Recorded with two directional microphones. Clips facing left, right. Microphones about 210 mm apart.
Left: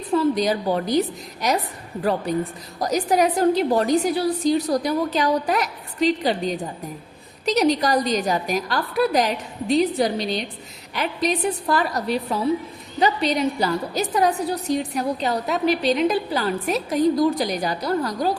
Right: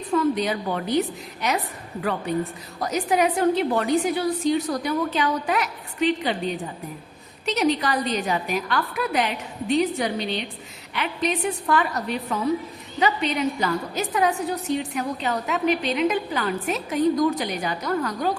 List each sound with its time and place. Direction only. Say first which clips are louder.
0.1 s a woman's voice: left 2 dB; 35° left (ahead or behind)
2.8 s a woman's voice: left 2 dB; 40° left (ahead or behind)